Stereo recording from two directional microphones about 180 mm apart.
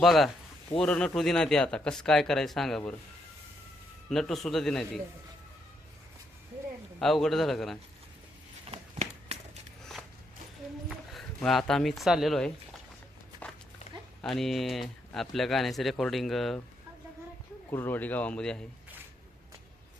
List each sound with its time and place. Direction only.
0.0 s speech: centre (ahead or behind)
4.1 s speech: centre (ahead or behind)
7.0 s speech: centre (ahead or behind)
8.6 s a sound: 35° right (ahead or behind)
10.8 s speech: centre (ahead or behind)
13.4 s a sound: 10° left (ahead or behind)
14.2 s speech: centre (ahead or behind)
17.7 s a man's voice: 10° left (ahead or behind)